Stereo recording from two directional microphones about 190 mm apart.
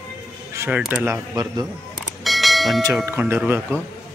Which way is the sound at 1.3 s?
20° right (ahead or behind).